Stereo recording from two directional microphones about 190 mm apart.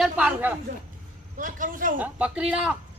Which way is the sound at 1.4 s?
45° right (ahead or behind).